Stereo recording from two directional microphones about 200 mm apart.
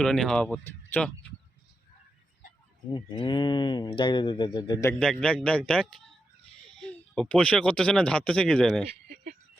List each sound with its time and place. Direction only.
0.0 s speech: 5° left (ahead or behind)
2.9 s speech: 20° left (ahead or behind); by 8.8 s 5° left (ahead or behind)
9.0 s a sound: 45° right (ahead or behind)